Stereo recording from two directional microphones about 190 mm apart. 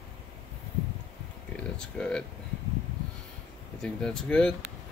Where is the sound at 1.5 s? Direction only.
5° left (ahead or behind).